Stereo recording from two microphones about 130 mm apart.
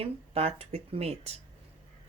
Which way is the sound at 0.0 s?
50° right (ahead or behind).